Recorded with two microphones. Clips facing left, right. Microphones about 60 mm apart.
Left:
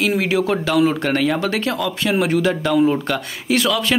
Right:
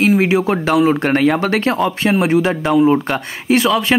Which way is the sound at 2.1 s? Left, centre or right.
Right.